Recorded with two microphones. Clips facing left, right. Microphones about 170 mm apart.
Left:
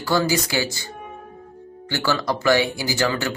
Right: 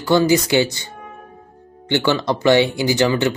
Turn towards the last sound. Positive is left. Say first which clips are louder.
# right 6 dB
turn(degrees=-20)  # may be behind; listen again after turning